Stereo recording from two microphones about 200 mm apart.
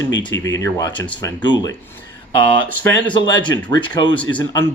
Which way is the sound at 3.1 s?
25° left (ahead or behind).